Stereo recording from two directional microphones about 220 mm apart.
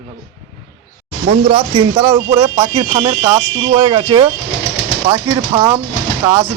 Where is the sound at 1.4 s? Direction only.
25° right (ahead or behind).